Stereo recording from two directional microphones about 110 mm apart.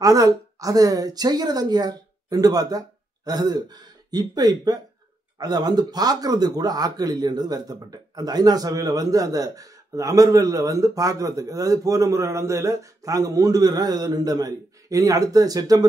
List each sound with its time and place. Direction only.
0.0 s speech: 30° right (ahead or behind)